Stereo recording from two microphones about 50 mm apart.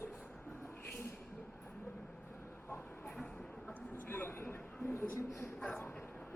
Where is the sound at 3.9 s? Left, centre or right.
Left.